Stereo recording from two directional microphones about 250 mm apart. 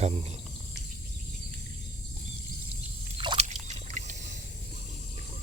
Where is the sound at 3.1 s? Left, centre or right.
Right.